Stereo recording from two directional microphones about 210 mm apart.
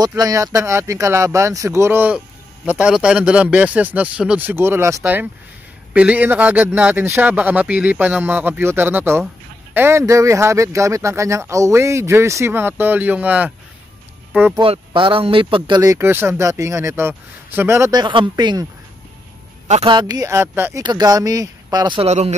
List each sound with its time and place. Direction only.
0.0 s speech: 15° right (ahead or behind)
14.5 s speech: 20° right (ahead or behind)
19.7 s speech: 25° right (ahead or behind)